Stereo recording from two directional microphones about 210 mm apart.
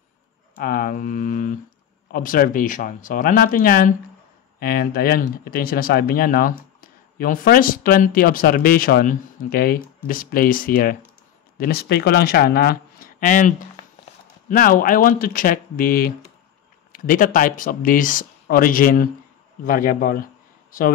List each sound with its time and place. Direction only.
0.6 s speech: 45° left (ahead or behind)